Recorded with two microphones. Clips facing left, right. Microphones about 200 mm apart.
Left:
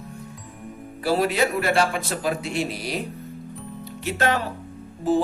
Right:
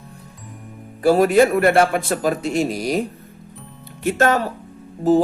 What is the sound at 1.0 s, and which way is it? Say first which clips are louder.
Speech: right 8 dB; 45° right (ahead or behind).